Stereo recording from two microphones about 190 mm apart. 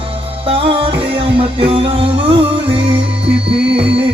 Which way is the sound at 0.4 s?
30° right (ahead or behind).